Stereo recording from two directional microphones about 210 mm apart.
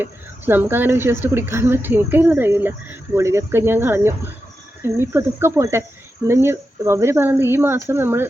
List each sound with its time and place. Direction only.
0.0 s speech: 10° right (ahead or behind)